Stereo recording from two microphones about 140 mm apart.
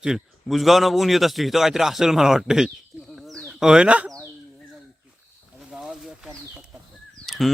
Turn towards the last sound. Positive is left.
turn(degrees=0)  # may be behind; listen again after turning